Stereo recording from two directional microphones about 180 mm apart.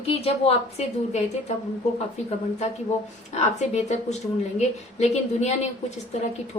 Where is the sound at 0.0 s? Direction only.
35° left (ahead or behind).